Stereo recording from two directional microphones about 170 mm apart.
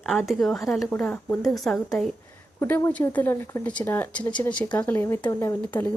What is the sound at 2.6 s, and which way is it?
Speech, 15° left (ahead or behind).